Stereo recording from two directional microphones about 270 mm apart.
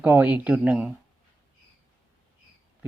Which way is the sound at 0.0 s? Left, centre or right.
Centre.